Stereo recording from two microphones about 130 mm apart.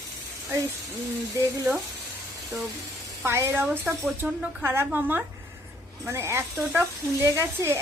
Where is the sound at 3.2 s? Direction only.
20° right (ahead or behind).